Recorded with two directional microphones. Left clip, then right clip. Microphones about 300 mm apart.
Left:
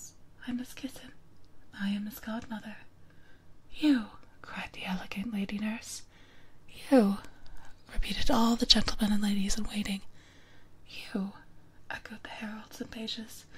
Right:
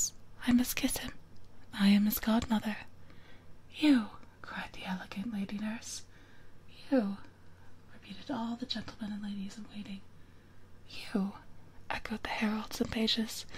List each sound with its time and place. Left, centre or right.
0.4 s speech: centre
3.7 s speech: centre
6.7 s a sound: left
8.0 s speech: left
11.0 s speech: centre
11.9 s speech: centre